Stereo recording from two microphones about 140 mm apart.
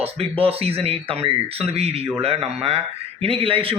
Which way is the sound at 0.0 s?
40° right (ahead or behind).